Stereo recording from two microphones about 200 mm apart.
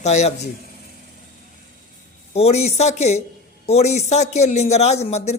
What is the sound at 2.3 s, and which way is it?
A man's voice, 30° left (ahead or behind).